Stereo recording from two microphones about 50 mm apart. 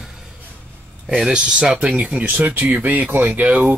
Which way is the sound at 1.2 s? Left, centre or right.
Centre.